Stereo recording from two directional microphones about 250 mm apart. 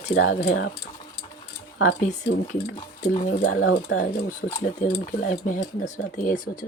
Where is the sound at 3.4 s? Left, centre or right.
Left.